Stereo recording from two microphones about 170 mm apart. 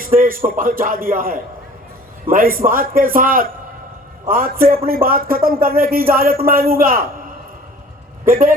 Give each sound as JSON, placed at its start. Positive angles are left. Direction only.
{"t": 0.0, "sound": "speech", "side_deg": -55}
{"t": 8.2, "sound": "speech", "side_deg": -55}